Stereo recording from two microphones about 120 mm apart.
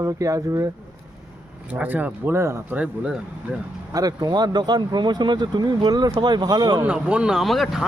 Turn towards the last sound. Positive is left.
turn(degrees=0)  # may be behind; listen again after turning